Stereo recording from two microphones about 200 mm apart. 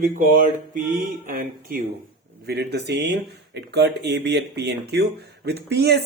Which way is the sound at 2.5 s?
55° right (ahead or behind).